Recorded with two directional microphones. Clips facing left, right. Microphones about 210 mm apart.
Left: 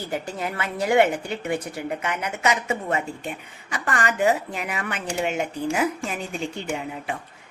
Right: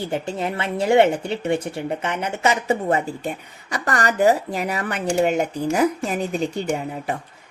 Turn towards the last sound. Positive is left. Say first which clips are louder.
# right 5 dB
turn(degrees=-40)  # may be behind; listen again after turning